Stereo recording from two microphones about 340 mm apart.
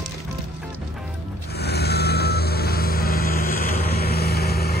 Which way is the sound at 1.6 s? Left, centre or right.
Left.